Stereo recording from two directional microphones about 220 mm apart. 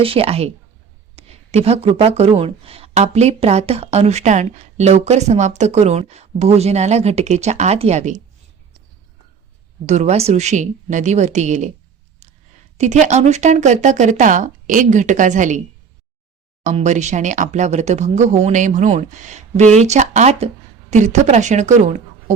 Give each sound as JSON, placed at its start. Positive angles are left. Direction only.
{"t": 0.0, "sound": "speech", "side_deg": -25}
{"t": 9.8, "sound": "speech", "side_deg": -30}
{"t": 12.2, "sound": "a sound", "side_deg": -30}
{"t": 12.7, "sound": "speech", "side_deg": -30}
{"t": 16.6, "sound": "speech", "side_deg": -30}